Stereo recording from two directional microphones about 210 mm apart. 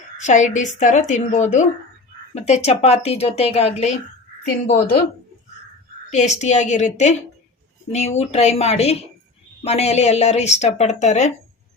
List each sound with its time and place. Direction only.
0.2 s speech: 35° left (ahead or behind)
4.4 s a woman's voice: 45° left (ahead or behind)
6.1 s speech: 35° left (ahead or behind)